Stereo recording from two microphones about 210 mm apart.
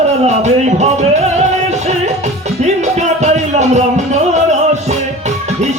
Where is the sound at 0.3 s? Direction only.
35° right (ahead or behind).